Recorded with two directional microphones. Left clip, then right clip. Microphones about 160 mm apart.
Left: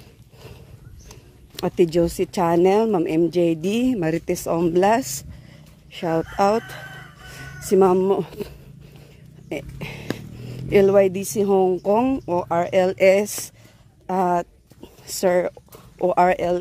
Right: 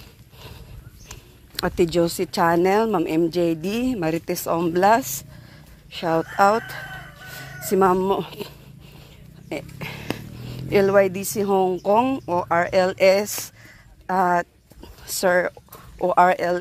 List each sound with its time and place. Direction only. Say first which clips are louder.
1.8 s a woman's voice: left 2 dB; 30° left (ahead or behind)